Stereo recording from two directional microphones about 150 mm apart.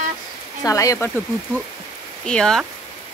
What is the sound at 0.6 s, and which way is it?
Speech, 20° left (ahead or behind).